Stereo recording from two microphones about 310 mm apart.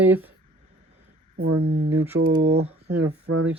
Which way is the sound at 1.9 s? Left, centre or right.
Centre.